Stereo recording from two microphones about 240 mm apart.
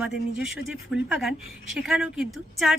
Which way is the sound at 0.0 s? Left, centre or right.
Centre.